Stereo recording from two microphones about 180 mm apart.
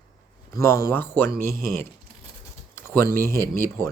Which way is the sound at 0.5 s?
15° left (ahead or behind).